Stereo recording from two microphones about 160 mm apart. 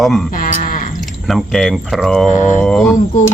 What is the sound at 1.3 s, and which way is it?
Speech, centre (ahead or behind).